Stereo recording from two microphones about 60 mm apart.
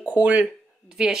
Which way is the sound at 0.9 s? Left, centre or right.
Centre.